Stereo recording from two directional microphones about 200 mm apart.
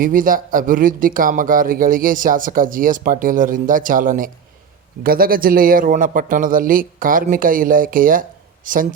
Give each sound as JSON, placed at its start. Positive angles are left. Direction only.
{"t": 0.0, "sound": "speech", "side_deg": -45}